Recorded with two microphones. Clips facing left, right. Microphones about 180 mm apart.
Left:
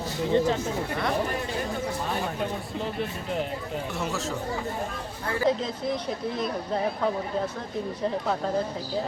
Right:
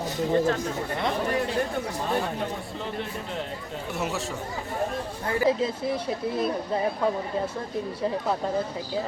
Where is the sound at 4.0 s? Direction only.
Centre (ahead or behind).